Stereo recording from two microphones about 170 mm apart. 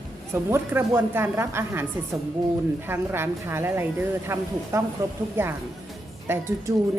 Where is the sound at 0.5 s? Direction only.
15° right (ahead or behind).